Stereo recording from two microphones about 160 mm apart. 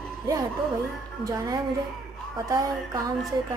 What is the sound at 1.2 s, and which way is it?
Speech, 20° right (ahead or behind).